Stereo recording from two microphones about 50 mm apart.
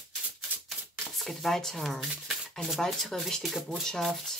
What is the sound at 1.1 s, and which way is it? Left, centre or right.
Speech, centre.